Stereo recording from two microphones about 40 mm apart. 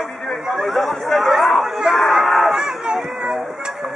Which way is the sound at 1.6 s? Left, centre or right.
Centre.